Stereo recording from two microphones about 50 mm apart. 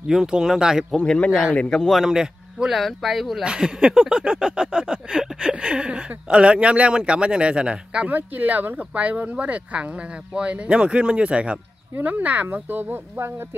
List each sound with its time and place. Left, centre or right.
0.1 s speech: centre
0.9 s speech: centre
1.8 s speech: centre
2.0 s speech: centre
3.4 s a sound: centre
8.1 s speech: right
10.3 s a sound: right
12.0 s speech: right
12.7 s speech: right